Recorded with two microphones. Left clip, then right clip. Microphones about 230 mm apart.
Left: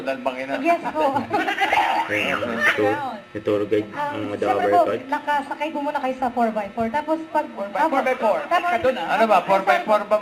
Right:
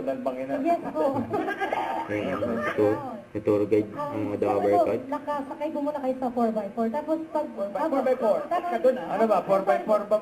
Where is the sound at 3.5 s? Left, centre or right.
Left.